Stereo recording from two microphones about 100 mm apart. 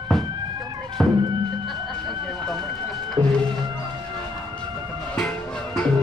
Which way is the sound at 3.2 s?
50° right (ahead or behind).